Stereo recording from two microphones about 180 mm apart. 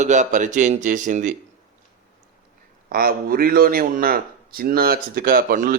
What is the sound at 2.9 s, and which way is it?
Speech, 55° right (ahead or behind).